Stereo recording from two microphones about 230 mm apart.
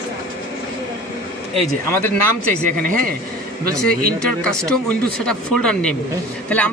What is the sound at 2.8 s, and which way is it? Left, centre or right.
Speech, right.